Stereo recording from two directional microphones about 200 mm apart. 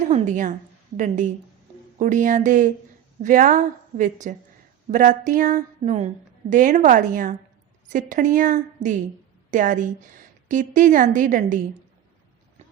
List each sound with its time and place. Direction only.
0.1 s a woman's voice: 40° right (ahead or behind)